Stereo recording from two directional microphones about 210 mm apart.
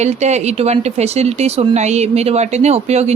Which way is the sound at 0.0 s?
35° right (ahead or behind).